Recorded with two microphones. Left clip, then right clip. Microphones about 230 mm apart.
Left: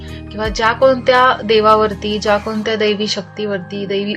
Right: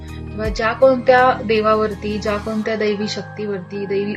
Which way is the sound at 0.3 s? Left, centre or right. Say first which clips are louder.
Left 3 dB; left.